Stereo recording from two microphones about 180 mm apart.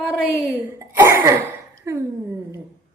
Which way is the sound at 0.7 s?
15° right (ahead or behind).